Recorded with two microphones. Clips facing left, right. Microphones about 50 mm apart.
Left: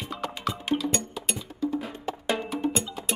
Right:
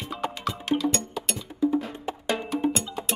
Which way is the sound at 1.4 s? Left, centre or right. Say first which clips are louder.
Right 6 dB; centre.